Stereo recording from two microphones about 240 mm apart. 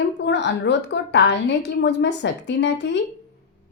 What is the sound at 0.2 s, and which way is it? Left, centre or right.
A woman's voice, left.